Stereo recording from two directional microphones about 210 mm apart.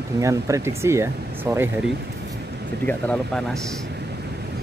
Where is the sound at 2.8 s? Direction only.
5° left (ahead or behind).